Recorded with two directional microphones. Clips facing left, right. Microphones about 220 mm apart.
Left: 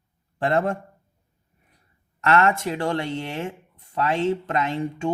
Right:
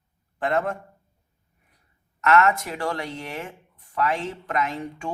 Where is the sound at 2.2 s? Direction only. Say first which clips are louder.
Even; 30° left (ahead or behind).